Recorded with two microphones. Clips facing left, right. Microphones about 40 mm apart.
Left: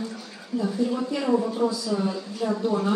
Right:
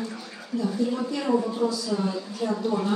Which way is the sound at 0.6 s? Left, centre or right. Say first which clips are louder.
Left 1 dB; centre.